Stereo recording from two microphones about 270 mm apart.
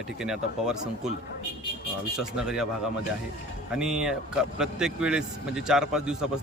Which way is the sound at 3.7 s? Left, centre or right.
Centre.